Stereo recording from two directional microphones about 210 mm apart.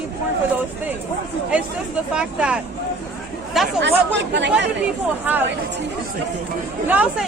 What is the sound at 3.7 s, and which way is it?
Speech, 55° right (ahead or behind).